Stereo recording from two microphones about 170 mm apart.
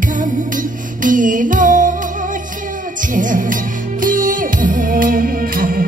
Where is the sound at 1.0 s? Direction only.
50° right (ahead or behind).